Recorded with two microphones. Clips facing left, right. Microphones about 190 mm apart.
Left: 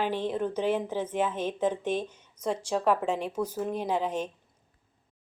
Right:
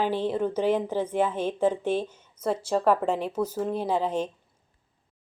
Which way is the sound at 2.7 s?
10° left (ahead or behind).